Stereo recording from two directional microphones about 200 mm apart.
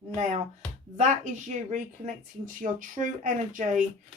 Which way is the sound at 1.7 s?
40° right (ahead or behind).